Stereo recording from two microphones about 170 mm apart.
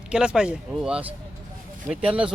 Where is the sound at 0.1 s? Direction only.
5° right (ahead or behind).